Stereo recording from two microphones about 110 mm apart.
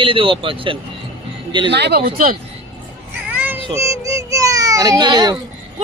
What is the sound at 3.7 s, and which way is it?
A child's voice, 30° right (ahead or behind).